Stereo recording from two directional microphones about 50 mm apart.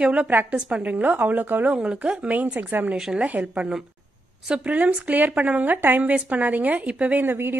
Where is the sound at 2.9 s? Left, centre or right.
Centre.